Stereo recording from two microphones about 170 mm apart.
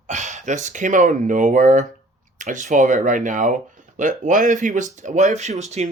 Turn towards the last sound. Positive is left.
turn(degrees=-40)  # may be behind; listen again after turning